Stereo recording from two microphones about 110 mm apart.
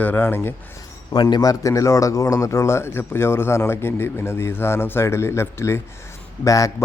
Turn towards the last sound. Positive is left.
turn(degrees=30)  # may be behind; listen again after turning